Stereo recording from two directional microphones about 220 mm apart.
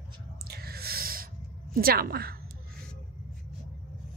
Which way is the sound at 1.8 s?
45° right (ahead or behind).